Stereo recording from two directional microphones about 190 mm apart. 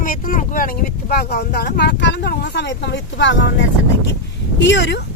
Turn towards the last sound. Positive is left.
turn(degrees=70)  # may be behind; listen again after turning